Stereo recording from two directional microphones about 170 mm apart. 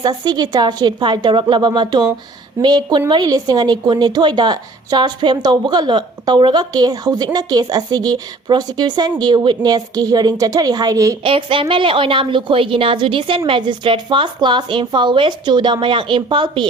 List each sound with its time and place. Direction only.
0.0 s a woman's voice: 25° right (ahead or behind)
11.2 s a woman's voice: 30° right (ahead or behind)